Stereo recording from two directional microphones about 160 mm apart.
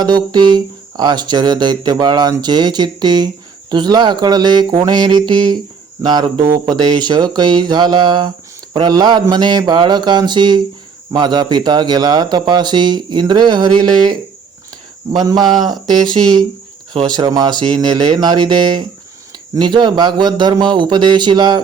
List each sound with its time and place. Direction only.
0.0 s speech: 25° right (ahead or behind)